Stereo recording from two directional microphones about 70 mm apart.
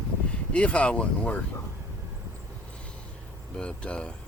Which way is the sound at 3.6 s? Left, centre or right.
Centre.